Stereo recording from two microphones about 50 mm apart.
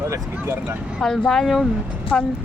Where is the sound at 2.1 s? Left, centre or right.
Left.